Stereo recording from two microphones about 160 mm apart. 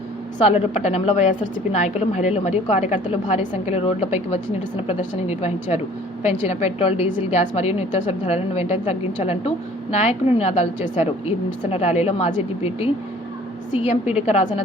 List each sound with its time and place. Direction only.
0.4 s a woman's voice: 45° left (ahead or behind)